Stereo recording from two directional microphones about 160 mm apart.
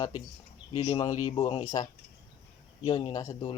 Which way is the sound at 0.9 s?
20° left (ahead or behind).